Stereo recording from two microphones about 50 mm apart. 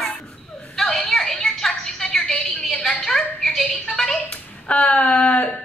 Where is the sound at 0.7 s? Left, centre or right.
Centre.